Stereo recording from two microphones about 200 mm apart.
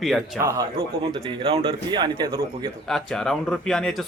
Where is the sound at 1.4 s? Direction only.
30° right (ahead or behind).